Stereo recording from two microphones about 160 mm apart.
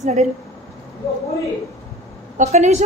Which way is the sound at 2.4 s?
45° right (ahead or behind).